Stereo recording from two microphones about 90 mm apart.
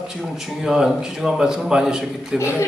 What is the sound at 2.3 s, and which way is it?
Speech, 30° left (ahead or behind).